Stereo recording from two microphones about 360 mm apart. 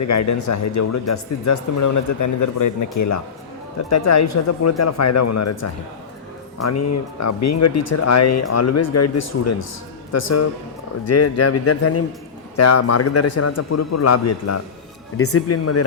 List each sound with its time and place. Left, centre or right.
0.1 s speech: left